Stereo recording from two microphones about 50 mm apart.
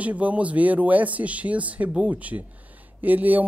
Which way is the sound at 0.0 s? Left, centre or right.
Right.